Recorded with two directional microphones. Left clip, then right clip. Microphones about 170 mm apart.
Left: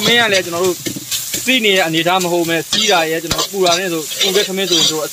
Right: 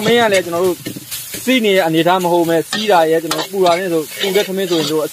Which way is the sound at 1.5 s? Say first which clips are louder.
Even; 35° right (ahead or behind).